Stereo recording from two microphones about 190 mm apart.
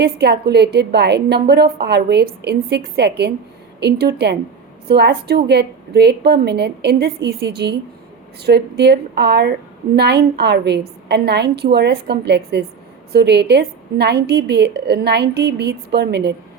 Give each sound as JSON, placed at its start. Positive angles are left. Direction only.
{"t": 0.0, "sound": "a woman's voice", "side_deg": -60}